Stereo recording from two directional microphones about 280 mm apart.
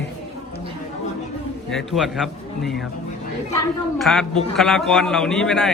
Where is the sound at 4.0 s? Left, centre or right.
Centre.